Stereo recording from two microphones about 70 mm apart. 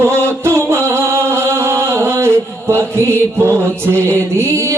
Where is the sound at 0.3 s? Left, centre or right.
Right.